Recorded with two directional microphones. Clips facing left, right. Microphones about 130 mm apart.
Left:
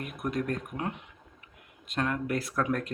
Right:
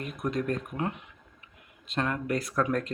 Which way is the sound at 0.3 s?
Centre (ahead or behind).